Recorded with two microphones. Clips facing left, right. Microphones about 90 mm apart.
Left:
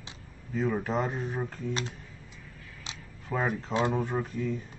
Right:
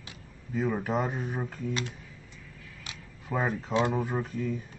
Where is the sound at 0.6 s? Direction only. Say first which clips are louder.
Even; 5° right (ahead or behind).